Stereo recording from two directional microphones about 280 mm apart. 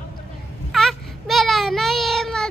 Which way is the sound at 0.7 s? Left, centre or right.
Centre.